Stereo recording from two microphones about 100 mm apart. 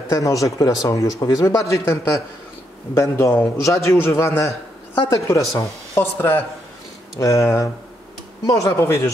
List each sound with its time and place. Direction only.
0.1 s a man's voice: 35° left (ahead or behind)
7.2 s a man's voice: 30° left (ahead or behind)